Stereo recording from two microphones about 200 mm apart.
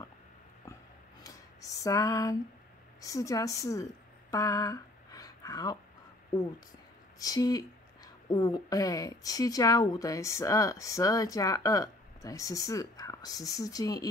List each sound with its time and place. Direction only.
1.2 s speech: 15° left (ahead or behind)
4.3 s a sound: 15° left (ahead or behind)
7.2 s speech: 20° left (ahead or behind)